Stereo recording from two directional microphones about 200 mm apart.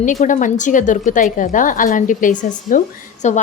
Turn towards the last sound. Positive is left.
turn(degrees=35)  # may be behind; listen again after turning